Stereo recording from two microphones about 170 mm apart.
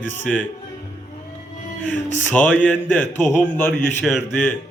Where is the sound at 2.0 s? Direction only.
10° left (ahead or behind).